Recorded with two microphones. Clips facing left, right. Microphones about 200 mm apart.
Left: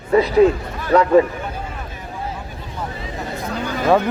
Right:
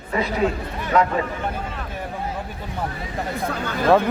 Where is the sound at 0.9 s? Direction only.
35° left (ahead or behind).